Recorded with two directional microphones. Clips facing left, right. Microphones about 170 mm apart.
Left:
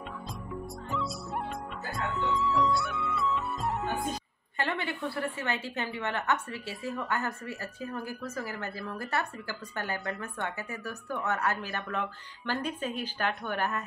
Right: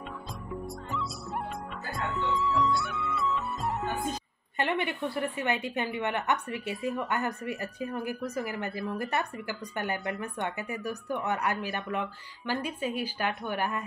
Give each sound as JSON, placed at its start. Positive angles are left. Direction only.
{"t": 0.8, "sound": "music", "side_deg": 0}
{"t": 4.6, "sound": "a woman's voice", "side_deg": -20}